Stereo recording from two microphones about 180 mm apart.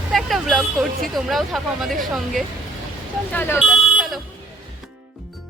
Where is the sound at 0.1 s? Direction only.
Centre (ahead or behind).